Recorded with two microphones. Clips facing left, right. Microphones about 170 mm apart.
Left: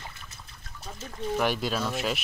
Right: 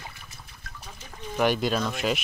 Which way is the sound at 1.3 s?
Centre (ahead or behind).